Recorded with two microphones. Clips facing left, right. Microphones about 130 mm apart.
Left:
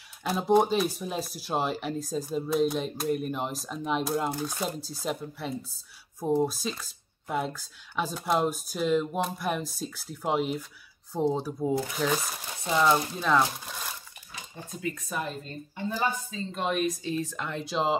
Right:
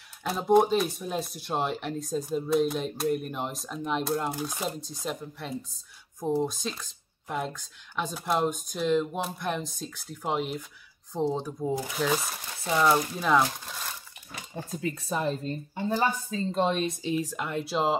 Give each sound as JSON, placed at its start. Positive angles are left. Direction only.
{"t": 0.2, "sound": "speech", "side_deg": 0}
{"t": 14.8, "sound": "speech", "side_deg": -30}
{"t": 17.1, "sound": "speech", "side_deg": -10}